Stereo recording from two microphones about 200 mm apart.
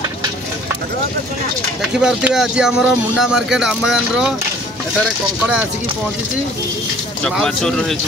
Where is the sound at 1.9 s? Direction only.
5° right (ahead or behind).